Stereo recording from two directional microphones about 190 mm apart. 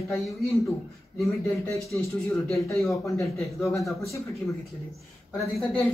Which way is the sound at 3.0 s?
15° left (ahead or behind).